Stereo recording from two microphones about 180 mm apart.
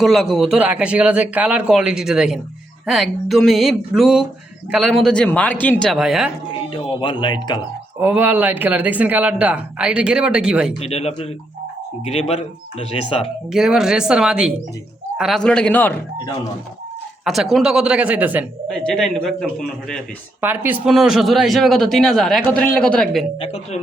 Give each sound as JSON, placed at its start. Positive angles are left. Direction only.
{"t": 0.0, "sound": "speech", "side_deg": 0}
{"t": 6.5, "sound": "speech", "side_deg": 30}
{"t": 7.9, "sound": "speech", "side_deg": -10}
{"t": 10.8, "sound": "speech", "side_deg": 35}
{"t": 13.5, "sound": "speech", "side_deg": -5}
{"t": 17.2, "sound": "speech", "side_deg": 0}
{"t": 18.7, "sound": "speech", "side_deg": 5}
{"t": 20.4, "sound": "speech", "side_deg": -10}
{"t": 23.4, "sound": "speech", "side_deg": 35}